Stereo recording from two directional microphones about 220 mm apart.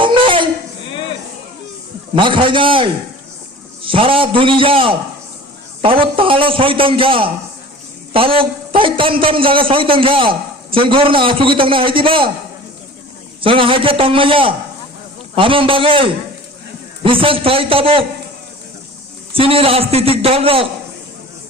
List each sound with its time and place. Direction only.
0.0 s a sound: 20° right (ahead or behind)
2.1 s a man's voice: 20° right (ahead or behind)
13.4 s a man's voice: 25° right (ahead or behind)
19.3 s a man's voice: 25° right (ahead or behind)